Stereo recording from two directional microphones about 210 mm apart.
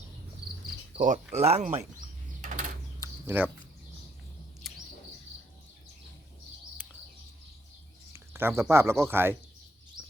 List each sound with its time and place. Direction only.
0.9 s speech: 40° right (ahead or behind)
3.0 s a sound: 10° right (ahead or behind)
4.6 s bird: centre (ahead or behind)
6.8 s bird: 5° right (ahead or behind)
8.1 s speech: 10° right (ahead or behind)